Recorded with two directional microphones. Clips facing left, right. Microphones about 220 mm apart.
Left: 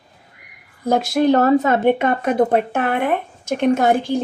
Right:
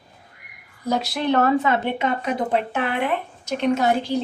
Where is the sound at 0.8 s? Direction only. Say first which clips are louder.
Left 7 dB; 50° left (ahead or behind).